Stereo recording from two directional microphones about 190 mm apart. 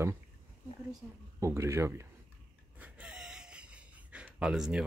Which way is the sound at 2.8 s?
5° right (ahead or behind).